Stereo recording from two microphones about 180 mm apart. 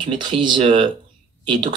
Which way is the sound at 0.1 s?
25° right (ahead or behind).